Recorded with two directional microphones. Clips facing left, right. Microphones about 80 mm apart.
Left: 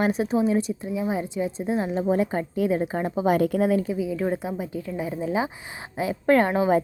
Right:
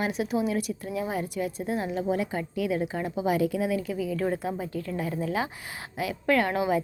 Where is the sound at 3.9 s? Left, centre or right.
Centre.